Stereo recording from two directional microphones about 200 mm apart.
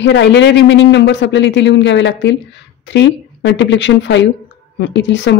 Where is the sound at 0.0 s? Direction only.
65° left (ahead or behind).